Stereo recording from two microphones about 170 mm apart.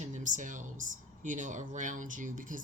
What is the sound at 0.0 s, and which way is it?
Speech, 45° right (ahead or behind).